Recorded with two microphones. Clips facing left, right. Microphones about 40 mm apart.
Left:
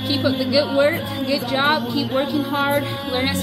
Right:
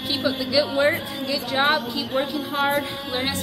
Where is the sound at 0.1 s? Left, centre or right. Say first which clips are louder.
Left 3 dB; centre.